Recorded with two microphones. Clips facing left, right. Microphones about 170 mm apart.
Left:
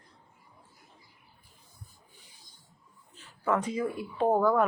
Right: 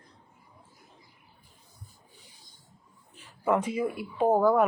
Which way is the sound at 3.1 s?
10° right (ahead or behind).